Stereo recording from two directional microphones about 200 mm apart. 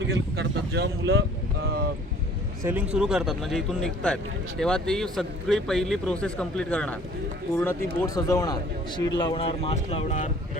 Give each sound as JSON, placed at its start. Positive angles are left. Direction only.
{"t": 0.3, "sound": "speech", "side_deg": -55}
{"t": 1.6, "sound": "vehicle", "side_deg": -50}
{"t": 2.6, "sound": "speech", "side_deg": -5}